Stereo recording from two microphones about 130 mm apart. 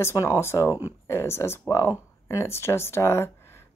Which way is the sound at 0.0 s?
20° left (ahead or behind).